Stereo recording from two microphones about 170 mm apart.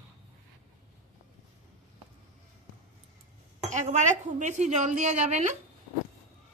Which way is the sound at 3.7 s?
45° right (ahead or behind).